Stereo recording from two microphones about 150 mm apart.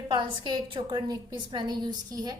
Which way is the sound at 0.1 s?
35° right (ahead or behind).